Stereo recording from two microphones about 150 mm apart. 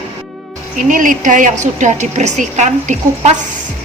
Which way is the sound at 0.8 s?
60° right (ahead or behind).